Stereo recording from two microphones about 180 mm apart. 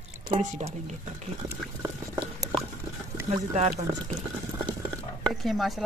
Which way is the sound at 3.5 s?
40° right (ahead or behind).